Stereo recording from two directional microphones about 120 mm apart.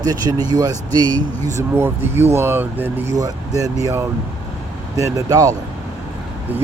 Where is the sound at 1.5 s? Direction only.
20° right (ahead or behind).